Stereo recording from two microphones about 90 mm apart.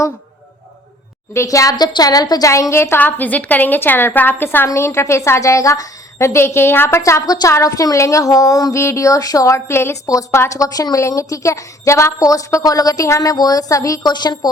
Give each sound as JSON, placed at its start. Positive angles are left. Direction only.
{"t": 1.3, "sound": "a woman's voice", "side_deg": 35}
{"t": 2.5, "sound": "a woman's voice", "side_deg": 35}
{"t": 14.1, "sound": "a woman's voice", "side_deg": 50}